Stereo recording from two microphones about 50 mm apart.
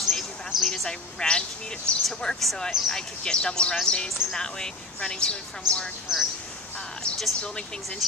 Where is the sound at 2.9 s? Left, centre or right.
Centre.